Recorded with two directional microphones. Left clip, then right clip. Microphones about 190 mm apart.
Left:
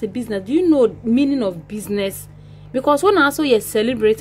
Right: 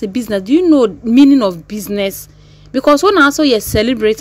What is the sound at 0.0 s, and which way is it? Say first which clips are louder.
Speech: right 6 dB; 25° right (ahead or behind).